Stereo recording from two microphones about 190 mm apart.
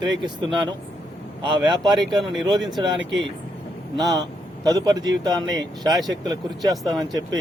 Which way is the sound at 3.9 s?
20° right (ahead or behind).